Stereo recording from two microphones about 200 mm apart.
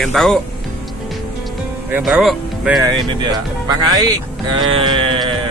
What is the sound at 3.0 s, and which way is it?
Speech, 20° right (ahead or behind).